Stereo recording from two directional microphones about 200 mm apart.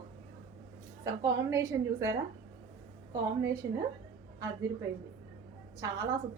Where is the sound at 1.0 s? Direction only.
15° right (ahead or behind).